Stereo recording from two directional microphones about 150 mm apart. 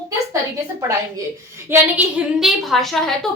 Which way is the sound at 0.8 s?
20° right (ahead or behind).